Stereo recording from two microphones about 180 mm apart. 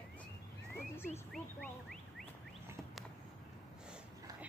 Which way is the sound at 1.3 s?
Centre (ahead or behind).